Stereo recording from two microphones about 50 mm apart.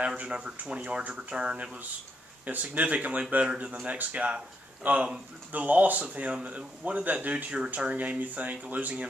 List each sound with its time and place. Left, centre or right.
0.0 s speech: right
6.0 s speech: right